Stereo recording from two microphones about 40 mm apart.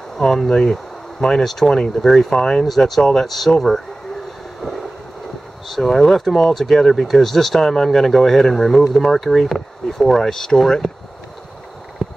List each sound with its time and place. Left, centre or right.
0.2 s speech: centre
2.6 s speech: centre
4.6 s wind noise: centre
5.7 s speech: centre
12.0 s a sound: centre